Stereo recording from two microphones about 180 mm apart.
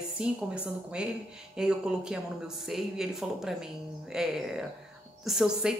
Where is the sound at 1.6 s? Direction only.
5° right (ahead or behind).